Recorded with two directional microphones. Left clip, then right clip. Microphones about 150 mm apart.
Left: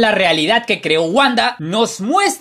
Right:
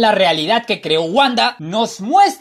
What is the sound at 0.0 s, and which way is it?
Speech, 10° left (ahead or behind).